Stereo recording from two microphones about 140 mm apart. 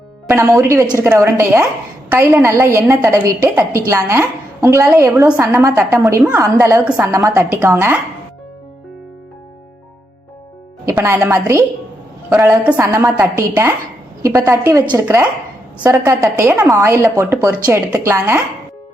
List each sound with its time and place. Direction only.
0.3 s a woman's voice: 20° right (ahead or behind)
7.1 s a woman's voice: 20° right (ahead or behind)
10.9 s a woman's voice: 20° right (ahead or behind)